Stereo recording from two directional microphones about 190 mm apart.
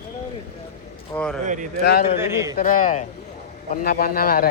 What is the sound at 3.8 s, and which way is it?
Speech, 55° left (ahead or behind).